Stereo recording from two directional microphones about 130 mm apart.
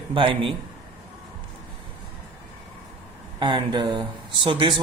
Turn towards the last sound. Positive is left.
turn(degrees=-40)  # may be behind; listen again after turning